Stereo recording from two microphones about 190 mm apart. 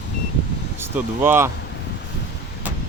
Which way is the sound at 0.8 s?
10° right (ahead or behind).